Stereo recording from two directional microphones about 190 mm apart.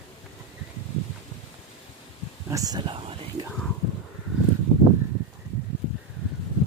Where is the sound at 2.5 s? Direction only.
20° right (ahead or behind).